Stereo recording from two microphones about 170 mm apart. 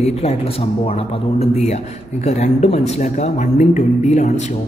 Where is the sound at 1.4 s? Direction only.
40° left (ahead or behind).